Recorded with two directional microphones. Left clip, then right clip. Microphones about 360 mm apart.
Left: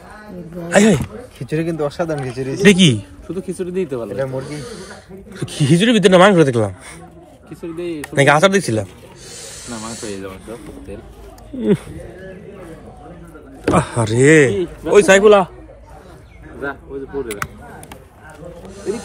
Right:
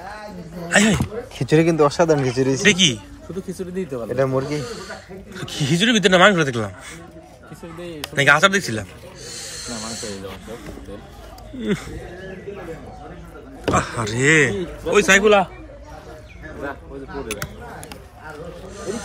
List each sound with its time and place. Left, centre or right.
0.7 s speech: centre
1.4 s speech: centre
2.6 s speech: centre
4.2 s a man's voice: centre
4.6 s speech: centre
8.1 s speech: centre
13.7 s speech: centre